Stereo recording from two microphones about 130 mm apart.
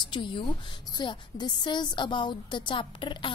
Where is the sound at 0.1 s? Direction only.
35° left (ahead or behind).